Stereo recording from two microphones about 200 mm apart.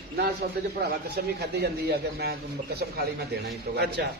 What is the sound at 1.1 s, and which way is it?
A man's voice, 55° right (ahead or behind).